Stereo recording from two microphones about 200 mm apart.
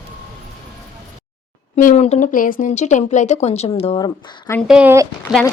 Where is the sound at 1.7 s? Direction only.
35° left (ahead or behind).